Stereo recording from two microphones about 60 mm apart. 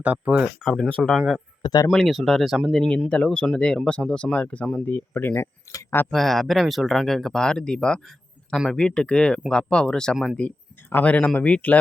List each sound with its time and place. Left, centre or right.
0.0 s speech: right
0.6 s speech: centre
1.1 s speech: centre
1.6 s speech: left
1.9 s speech: centre
3.1 s speech: centre
4.9 s speech: left
5.3 s speech: left
6.1 s speech: centre
10.4 s speech: left